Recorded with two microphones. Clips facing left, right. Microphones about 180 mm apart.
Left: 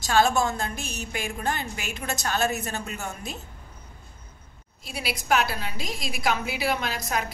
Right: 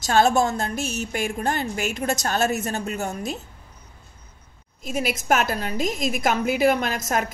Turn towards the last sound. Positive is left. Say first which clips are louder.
# right 4 dB
turn(degrees=-45)  # may be behind; listen again after turning